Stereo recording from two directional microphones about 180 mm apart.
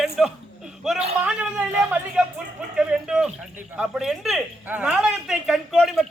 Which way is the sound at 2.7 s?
5° right (ahead or behind).